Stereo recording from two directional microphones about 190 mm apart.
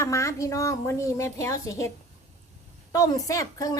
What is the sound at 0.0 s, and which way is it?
A woman's voice, 15° left (ahead or behind).